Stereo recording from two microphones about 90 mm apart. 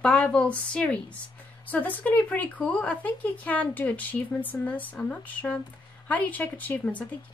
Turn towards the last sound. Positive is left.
turn(degrees=20)  # may be behind; listen again after turning